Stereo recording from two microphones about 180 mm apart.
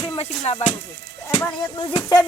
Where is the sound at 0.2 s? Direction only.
35° left (ahead or behind).